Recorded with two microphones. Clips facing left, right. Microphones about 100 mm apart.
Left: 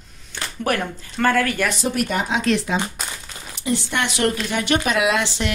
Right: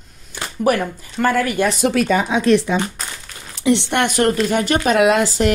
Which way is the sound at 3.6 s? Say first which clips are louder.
Right 6 dB; 75° right (ahead or behind).